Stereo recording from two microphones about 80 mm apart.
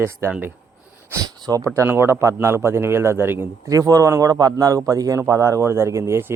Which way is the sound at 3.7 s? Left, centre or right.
Right.